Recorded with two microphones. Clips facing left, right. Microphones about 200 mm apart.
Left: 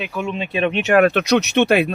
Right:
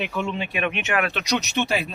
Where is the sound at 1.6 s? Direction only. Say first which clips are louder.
Left 11 dB; 60° left (ahead or behind).